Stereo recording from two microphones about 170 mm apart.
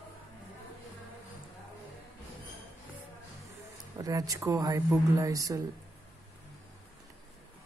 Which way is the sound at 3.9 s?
20° right (ahead or behind).